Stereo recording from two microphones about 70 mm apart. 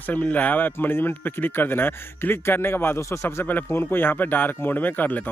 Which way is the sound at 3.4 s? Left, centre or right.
Left.